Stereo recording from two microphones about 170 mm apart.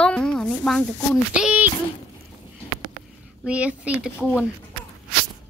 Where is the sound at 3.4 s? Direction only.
10° right (ahead or behind).